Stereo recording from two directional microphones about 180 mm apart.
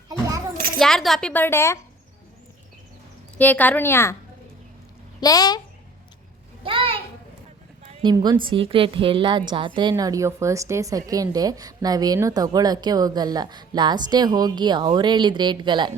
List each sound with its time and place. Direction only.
0.1 s a sound: 20° right (ahead or behind)
0.8 s a woman's voice: centre (ahead or behind)
3.3 s a woman's voice: 10° left (ahead or behind)
5.2 s speech: 20° left (ahead or behind)
6.7 s a sound: 30° right (ahead or behind)
8.1 s a woman's voice: 20° right (ahead or behind)